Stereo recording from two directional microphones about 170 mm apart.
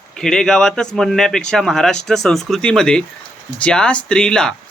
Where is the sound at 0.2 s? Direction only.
5° left (ahead or behind).